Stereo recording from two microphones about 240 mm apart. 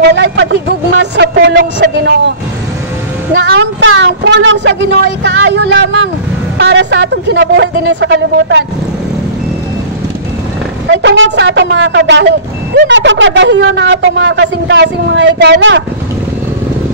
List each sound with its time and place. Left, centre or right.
0.0 s speech: right
3.3 s speech: right
10.9 s speech: right